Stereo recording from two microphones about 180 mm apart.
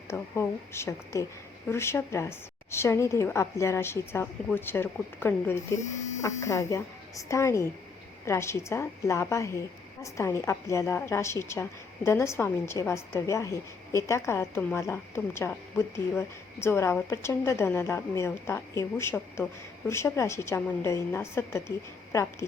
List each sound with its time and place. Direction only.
0.1 s a woman's voice: 15° left (ahead or behind)